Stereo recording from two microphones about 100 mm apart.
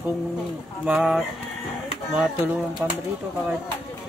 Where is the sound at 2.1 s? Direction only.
15° right (ahead or behind).